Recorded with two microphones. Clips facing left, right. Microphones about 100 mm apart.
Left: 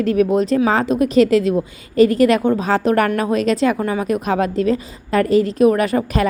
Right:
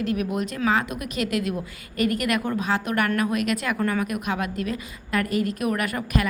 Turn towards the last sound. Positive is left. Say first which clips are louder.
# left 8 dB
turn(degrees=30)  # may be behind; listen again after turning